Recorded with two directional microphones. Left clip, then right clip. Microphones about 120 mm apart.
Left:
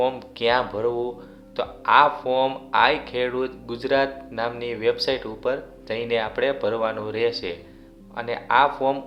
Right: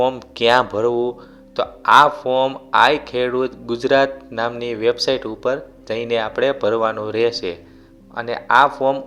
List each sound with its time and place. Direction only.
0.2 s speech: 60° right (ahead or behind)